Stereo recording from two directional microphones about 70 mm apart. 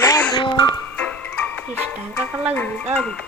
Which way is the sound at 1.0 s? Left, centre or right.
Centre.